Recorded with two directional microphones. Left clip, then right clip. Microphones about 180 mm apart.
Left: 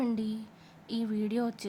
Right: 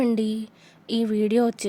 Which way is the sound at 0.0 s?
40° right (ahead or behind).